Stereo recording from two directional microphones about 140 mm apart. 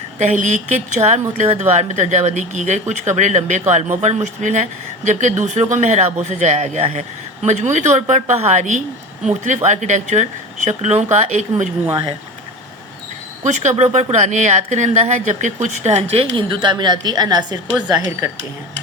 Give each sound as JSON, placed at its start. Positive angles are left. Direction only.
{"t": 0.2, "sound": "speech", "side_deg": -60}
{"t": 13.4, "sound": "speech", "side_deg": -55}
{"t": 16.3, "sound": "a woman's voice", "side_deg": -35}
{"t": 17.7, "sound": "speech", "side_deg": -5}